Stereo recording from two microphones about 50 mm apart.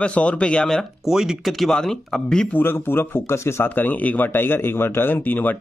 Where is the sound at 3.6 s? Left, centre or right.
Left.